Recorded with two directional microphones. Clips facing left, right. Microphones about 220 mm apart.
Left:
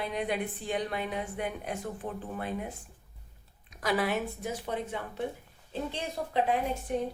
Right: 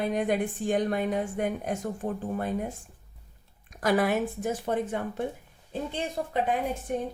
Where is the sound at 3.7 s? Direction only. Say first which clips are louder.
Right 5 dB; 50° right (ahead or behind).